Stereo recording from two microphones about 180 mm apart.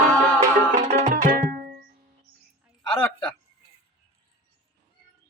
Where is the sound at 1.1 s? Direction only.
55° right (ahead or behind).